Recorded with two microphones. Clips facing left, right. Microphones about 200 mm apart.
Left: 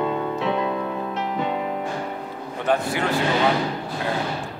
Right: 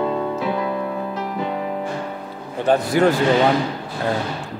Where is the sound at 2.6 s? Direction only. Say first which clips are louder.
Right 5 dB; 35° right (ahead or behind).